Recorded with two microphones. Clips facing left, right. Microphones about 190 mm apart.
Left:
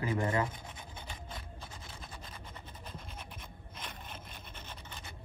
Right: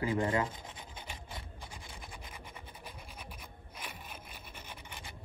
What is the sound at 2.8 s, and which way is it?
Rub, 10° right (ahead or behind).